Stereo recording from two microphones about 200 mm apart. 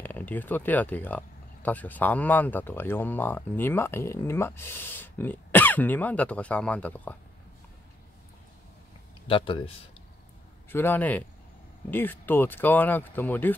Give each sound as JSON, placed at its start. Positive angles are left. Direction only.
{"t": 0.0, "sound": "speech", "side_deg": 10}
{"t": 9.3, "sound": "speech", "side_deg": 25}
{"t": 10.7, "sound": "speech", "side_deg": 10}